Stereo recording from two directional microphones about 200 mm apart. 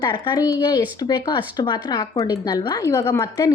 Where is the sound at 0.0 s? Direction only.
20° left (ahead or behind).